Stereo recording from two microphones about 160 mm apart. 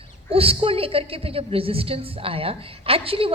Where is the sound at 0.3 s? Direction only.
35° right (ahead or behind).